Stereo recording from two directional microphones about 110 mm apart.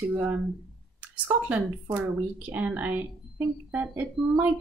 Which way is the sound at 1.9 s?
15° right (ahead or behind).